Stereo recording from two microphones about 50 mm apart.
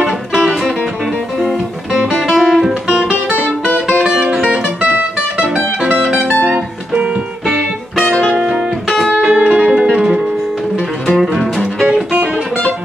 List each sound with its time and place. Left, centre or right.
0.3 s music: centre
2.0 s guitar: centre
3.8 s music: centre
6.4 s music: right
8.3 s music: centre
9.1 s music: right; by 11.6 s centre